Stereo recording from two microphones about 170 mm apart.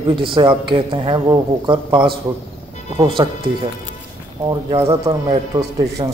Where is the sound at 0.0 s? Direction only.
30° right (ahead or behind).